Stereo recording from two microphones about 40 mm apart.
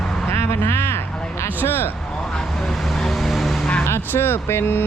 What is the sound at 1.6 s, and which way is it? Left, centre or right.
Speech, left.